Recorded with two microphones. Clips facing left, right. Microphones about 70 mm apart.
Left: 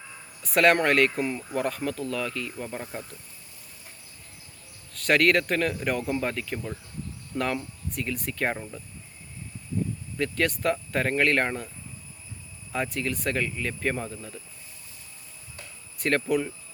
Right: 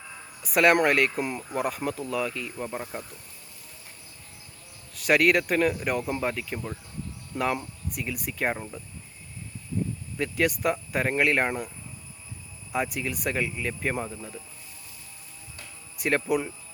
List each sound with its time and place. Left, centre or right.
0.4 s speech: centre
1.2 s speech: centre
4.9 s speech: centre
10.2 s speech: centre
12.7 s speech: centre
16.0 s speech: centre